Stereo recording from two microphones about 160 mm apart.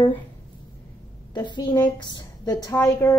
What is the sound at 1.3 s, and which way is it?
A woman's voice, 30° left (ahead or behind).